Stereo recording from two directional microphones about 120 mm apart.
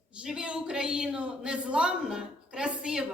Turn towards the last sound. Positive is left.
turn(degrees=-5)  # may be behind; listen again after turning